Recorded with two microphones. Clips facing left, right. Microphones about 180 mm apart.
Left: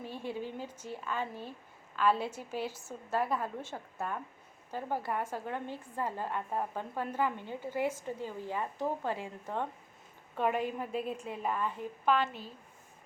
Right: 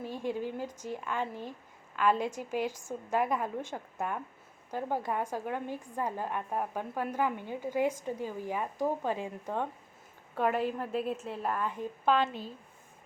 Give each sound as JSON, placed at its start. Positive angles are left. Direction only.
{"t": 0.0, "sound": "a woman's voice", "side_deg": -15}
{"t": 11.6, "sound": "a woman's voice", "side_deg": -15}